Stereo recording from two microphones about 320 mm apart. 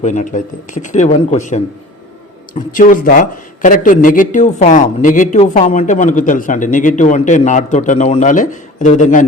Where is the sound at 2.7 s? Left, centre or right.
Left.